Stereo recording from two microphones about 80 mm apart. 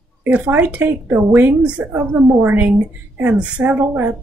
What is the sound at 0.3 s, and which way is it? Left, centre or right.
A woman's voice, right.